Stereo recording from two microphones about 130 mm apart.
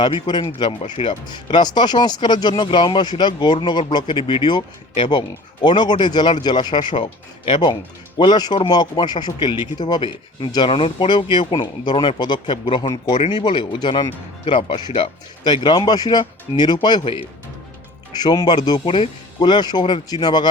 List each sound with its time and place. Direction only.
0.0 s speech: 35° left (ahead or behind)
18.1 s speech: 30° left (ahead or behind)